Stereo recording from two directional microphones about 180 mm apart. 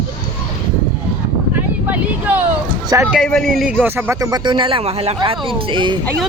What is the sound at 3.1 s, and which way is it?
A man's voice, centre (ahead or behind).